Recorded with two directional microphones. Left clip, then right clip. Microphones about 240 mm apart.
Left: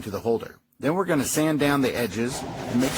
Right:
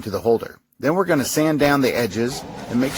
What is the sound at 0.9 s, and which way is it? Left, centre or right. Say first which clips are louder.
Speech: right 5 dB; right.